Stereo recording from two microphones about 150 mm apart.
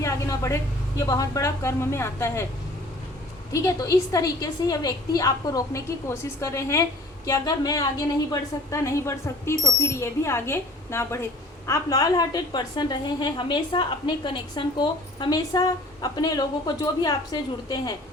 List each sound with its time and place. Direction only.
0.0 s a woman's voice: 20° left (ahead or behind)
3.5 s a woman's voice: 20° left (ahead or behind)